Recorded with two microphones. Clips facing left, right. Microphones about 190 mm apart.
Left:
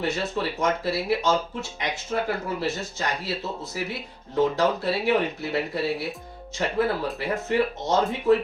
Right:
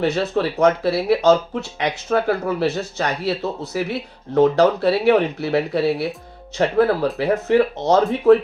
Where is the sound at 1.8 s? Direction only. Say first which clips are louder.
Right 8 dB; 70° right (ahead or behind).